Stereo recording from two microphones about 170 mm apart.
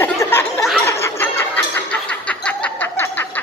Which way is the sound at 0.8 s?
15° left (ahead or behind).